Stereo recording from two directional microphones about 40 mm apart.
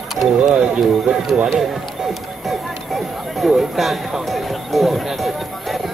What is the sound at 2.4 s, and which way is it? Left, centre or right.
Speech, centre.